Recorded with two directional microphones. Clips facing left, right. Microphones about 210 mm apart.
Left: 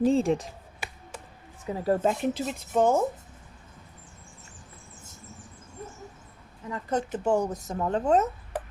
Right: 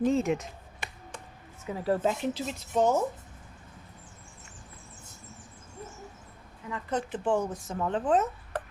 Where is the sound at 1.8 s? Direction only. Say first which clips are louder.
Left 3 dB; 45° left (ahead or behind).